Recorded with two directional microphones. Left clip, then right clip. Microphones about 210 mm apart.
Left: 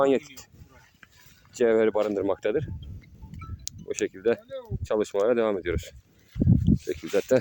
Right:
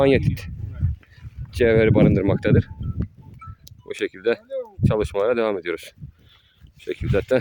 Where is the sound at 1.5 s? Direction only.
Centre (ahead or behind).